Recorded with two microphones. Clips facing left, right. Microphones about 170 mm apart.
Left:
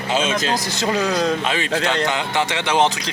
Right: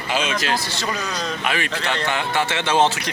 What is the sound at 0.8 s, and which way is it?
Speech, 80° left.